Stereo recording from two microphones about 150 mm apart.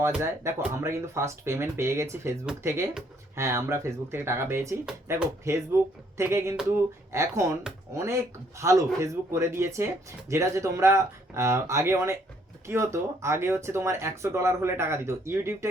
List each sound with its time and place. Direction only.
0.2 s speech: 20° right (ahead or behind)